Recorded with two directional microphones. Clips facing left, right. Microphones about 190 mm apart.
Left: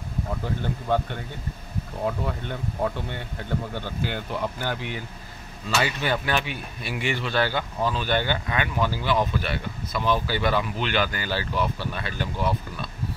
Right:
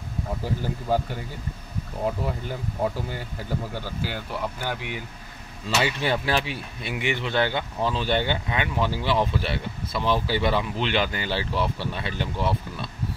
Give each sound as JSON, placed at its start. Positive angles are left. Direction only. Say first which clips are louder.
{"t": 0.6, "sound": "speech", "louder": "even", "side_deg": -5}
{"t": 2.2, "sound": "speech", "louder": "even", "side_deg": -5}
{"t": 5.7, "sound": "speech", "louder": "right 1 dB", "side_deg": -25}